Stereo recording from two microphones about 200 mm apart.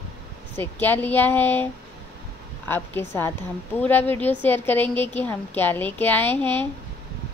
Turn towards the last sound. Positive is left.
turn(degrees=10)  # may be behind; listen again after turning